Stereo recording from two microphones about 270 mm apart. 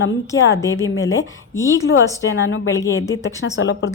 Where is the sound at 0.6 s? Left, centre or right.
Centre.